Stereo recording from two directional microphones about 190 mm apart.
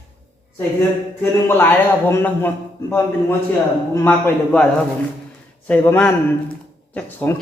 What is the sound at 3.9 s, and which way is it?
A man's voice, 10° left (ahead or behind).